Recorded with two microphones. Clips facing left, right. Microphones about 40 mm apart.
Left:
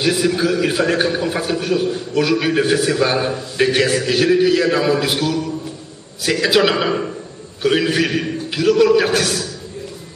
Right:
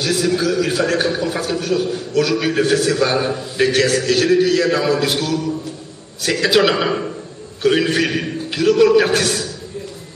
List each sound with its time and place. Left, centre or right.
0.0 s a man's voice: centre